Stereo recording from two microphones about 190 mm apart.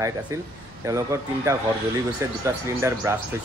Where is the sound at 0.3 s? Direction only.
15° right (ahead or behind).